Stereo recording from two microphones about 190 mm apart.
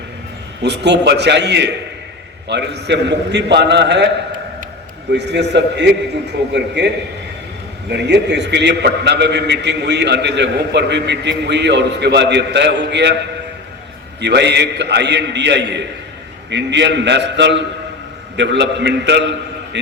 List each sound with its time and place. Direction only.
0.6 s a man's voice: 65° right (ahead or behind)
5.1 s a man's voice: 65° right (ahead or behind)
14.2 s a man's voice: 65° right (ahead or behind)